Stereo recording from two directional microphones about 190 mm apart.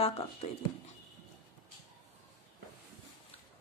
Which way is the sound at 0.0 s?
30° left (ahead or behind).